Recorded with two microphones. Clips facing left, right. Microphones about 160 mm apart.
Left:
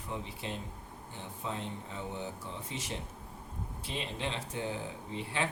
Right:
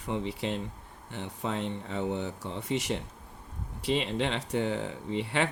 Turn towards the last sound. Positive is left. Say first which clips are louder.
# right 7 dB
turn(degrees=-70)  # may be behind; listen again after turning